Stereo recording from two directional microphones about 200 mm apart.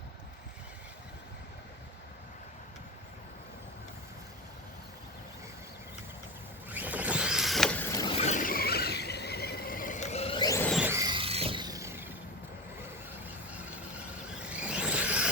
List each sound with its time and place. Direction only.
6.7 s power windows: 10° right (ahead or behind)
8.2 s vehicle: 40° left (ahead or behind); by 10.7 s 15° left (ahead or behind)
10.7 s a sound: 10° right (ahead or behind)
11.1 s vehicle: 30° right (ahead or behind)
14.5 s vehicle: 5° right (ahead or behind)